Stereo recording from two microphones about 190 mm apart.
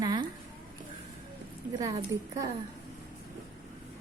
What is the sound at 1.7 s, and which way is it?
Speech, 20° right (ahead or behind).